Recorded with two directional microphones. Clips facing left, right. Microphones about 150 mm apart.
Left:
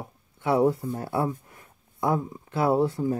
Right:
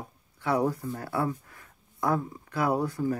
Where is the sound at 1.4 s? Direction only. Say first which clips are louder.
Left 2 dB; 25° left (ahead or behind).